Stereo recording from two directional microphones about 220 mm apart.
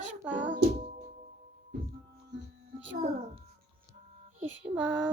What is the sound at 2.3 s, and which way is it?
Music, 50° right (ahead or behind).